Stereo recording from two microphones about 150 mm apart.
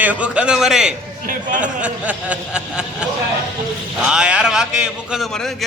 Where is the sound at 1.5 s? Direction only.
60° right (ahead or behind).